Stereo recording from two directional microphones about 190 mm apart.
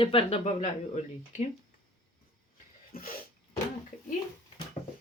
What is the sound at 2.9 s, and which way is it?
Sneeze, 55° left (ahead or behind).